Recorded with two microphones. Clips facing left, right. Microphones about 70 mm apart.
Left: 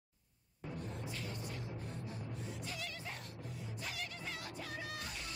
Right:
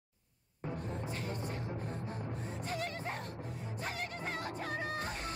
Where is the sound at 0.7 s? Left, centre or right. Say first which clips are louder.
Right 5 dB; right.